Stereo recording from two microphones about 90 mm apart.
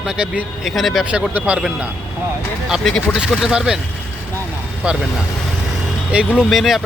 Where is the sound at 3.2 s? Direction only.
10° right (ahead or behind).